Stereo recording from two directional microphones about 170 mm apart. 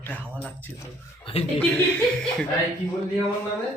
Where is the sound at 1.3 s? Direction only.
35° left (ahead or behind).